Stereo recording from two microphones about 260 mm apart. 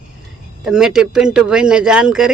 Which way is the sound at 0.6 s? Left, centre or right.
Centre.